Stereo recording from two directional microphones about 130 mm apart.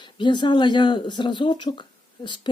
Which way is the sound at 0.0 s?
35° left (ahead or behind).